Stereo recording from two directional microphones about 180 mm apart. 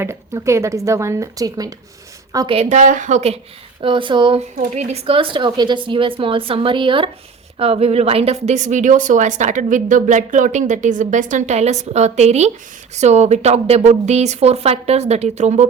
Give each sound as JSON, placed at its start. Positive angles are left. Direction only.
{"t": 0.0, "sound": "a woman's voice", "side_deg": -15}
{"t": 2.5, "sound": "a woman's voice", "side_deg": -40}
{"t": 3.8, "sound": "a woman's voice", "side_deg": -30}